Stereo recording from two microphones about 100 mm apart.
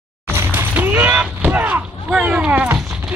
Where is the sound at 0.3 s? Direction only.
25° right (ahead or behind).